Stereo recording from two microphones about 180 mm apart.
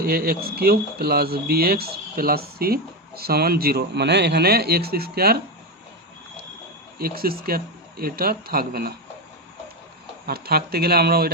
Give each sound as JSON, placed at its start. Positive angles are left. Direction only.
{"t": 0.0, "sound": "speech", "side_deg": -55}
{"t": 7.0, "sound": "speech", "side_deg": -55}
{"t": 10.2, "sound": "speech", "side_deg": -60}